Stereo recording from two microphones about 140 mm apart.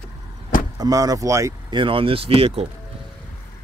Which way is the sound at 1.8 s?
40° right (ahead or behind).